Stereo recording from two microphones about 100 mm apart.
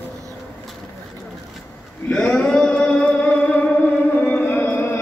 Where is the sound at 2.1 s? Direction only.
5° left (ahead or behind).